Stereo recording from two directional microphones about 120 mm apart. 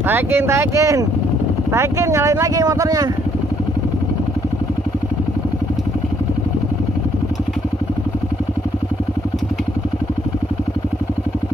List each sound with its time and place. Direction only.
0.0 s speech: 20° right (ahead or behind)